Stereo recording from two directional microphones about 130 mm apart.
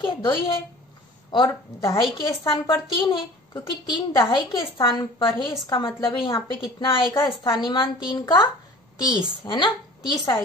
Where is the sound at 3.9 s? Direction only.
35° left (ahead or behind).